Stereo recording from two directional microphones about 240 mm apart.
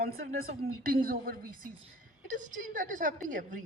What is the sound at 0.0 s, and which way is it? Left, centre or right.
A woman's voice, right.